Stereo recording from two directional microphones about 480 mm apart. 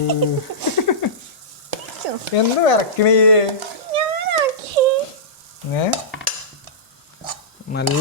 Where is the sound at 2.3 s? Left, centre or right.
Left.